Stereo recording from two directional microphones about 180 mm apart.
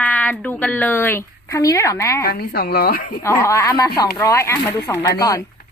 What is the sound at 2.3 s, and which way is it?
Speech, 60° left (ahead or behind).